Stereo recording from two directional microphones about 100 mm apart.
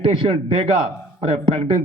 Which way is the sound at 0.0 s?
60° right (ahead or behind).